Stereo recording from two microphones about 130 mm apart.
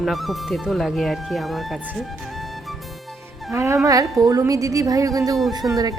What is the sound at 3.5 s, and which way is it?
Speech, 20° right (ahead or behind).